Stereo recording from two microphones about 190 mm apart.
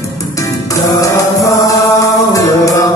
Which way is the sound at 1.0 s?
20° left (ahead or behind).